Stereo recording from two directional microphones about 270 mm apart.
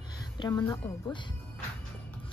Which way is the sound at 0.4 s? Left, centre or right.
Centre.